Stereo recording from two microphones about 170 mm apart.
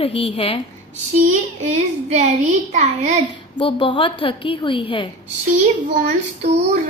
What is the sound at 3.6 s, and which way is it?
Speech, 30° left (ahead or behind).